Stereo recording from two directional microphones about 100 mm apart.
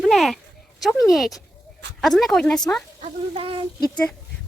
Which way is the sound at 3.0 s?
70° right (ahead or behind).